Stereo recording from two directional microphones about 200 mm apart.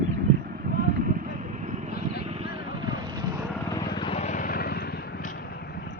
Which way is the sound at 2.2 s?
30° right (ahead or behind).